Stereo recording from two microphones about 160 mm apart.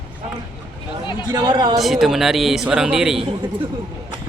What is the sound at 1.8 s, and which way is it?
Speech, centre (ahead or behind).